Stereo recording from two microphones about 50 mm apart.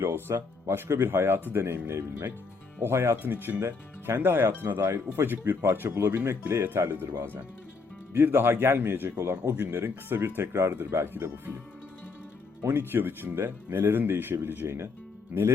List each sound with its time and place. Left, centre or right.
0.0 s speech: right
3.3 s speech: right
3.6 s speech: right
6.5 s speech: right
8.1 s speech: right
12.6 s speech: right